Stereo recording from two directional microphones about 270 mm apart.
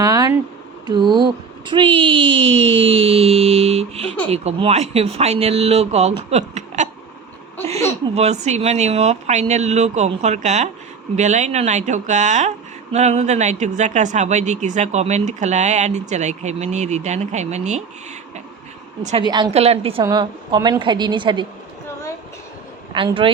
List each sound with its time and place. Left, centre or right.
0.0 s a sound: centre
0.9 s a woman's voice: centre
8.1 s a woman's voice: right
19.0 s a woman's voice: centre
22.9 s speech: centre